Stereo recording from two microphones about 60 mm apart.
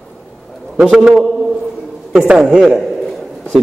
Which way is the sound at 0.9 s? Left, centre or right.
Centre.